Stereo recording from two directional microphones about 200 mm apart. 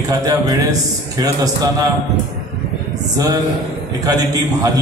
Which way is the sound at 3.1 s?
20° right (ahead or behind).